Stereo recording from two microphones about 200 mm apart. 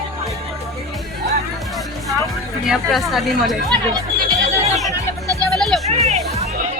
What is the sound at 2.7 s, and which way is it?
Speech, centre (ahead or behind).